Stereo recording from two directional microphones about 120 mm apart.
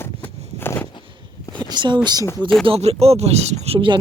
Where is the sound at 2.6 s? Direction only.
55° right (ahead or behind).